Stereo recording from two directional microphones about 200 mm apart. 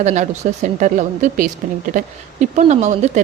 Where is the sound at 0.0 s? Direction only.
35° right (ahead or behind).